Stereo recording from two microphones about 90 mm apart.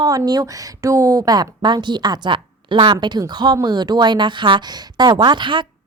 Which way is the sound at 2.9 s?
50° right (ahead or behind).